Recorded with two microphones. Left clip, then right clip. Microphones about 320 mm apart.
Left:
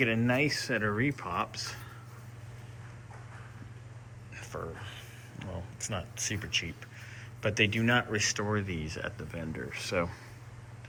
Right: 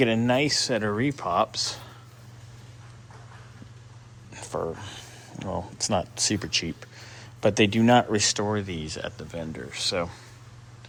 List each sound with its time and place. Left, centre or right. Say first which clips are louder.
0.0 s speech: right 5 dB; centre
4.3 s speech: right 10 dB; centre